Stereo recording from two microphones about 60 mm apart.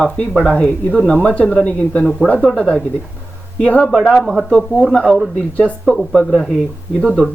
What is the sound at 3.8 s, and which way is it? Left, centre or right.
Speech, centre.